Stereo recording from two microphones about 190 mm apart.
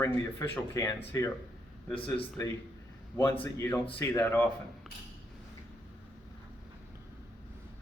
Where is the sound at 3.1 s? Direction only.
10° left (ahead or behind).